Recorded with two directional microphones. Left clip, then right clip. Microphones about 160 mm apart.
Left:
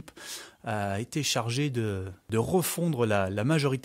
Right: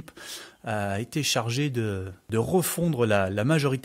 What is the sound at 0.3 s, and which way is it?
Speech, 30° left (ahead or behind).